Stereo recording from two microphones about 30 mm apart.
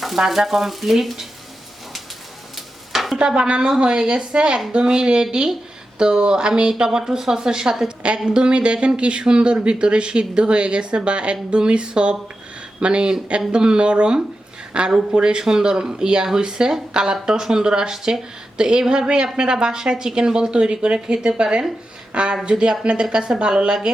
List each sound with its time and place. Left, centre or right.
0.3 s speech: centre
2.9 s stir: centre
3.2 s a woman's voice: right; by 7.9 s centre
7.9 s a woman's voice: right